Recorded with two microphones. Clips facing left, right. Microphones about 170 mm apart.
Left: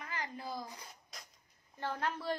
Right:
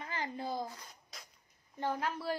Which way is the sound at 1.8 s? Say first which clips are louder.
Right 2 dB; 10° right (ahead or behind).